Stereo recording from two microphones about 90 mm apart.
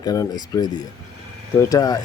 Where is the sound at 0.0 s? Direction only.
45° left (ahead or behind).